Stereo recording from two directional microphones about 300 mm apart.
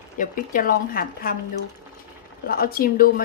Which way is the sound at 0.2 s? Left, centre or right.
Left.